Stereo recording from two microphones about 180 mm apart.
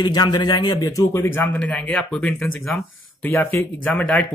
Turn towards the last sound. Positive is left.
turn(degrees=5)  # may be behind; listen again after turning